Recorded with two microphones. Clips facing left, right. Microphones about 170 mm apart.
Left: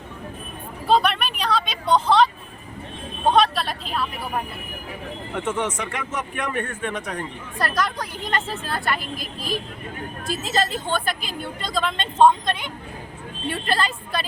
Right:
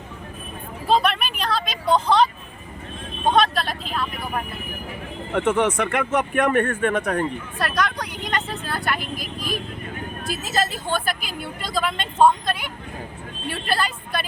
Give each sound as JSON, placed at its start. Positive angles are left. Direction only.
{"t": 0.9, "sound": "vehicle", "side_deg": 0}
{"t": 3.2, "sound": "a woman's voice", "side_deg": 0}
{"t": 5.3, "sound": "speech", "side_deg": -60}
{"t": 7.6, "sound": "a woman's voice", "side_deg": 0}
{"t": 10.5, "sound": "a woman's voice", "side_deg": -5}